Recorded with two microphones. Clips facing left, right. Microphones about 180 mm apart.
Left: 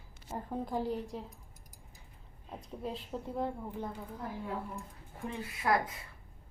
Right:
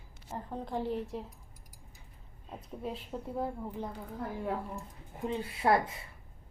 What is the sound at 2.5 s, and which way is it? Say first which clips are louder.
A woman's voice: right 1 dB; 5° right (ahead or behind).